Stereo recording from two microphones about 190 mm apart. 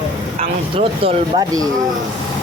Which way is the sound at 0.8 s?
30° right (ahead or behind).